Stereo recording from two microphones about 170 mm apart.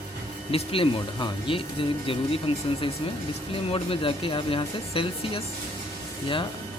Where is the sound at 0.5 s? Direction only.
30° left (ahead or behind).